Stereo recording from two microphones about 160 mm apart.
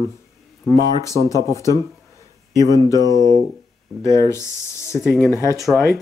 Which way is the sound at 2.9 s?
20° left (ahead or behind).